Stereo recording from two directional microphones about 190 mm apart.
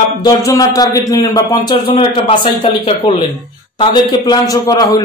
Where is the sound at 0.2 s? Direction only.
20° left (ahead or behind).